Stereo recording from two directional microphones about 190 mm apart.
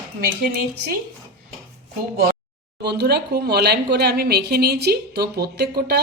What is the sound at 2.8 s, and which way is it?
A woman's voice, 60° right (ahead or behind).